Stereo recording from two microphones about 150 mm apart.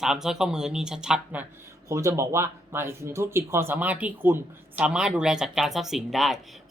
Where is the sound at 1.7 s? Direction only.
20° right (ahead or behind).